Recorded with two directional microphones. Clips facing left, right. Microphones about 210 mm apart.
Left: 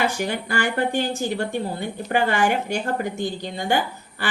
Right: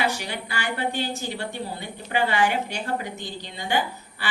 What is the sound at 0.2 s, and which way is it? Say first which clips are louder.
A woman's voice: left 8 dB; 50° left (ahead or behind).